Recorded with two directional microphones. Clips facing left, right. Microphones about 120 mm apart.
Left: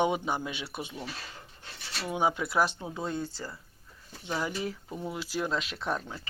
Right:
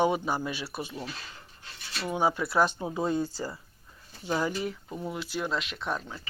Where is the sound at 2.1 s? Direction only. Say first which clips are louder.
Right 1 dB; 15° left (ahead or behind).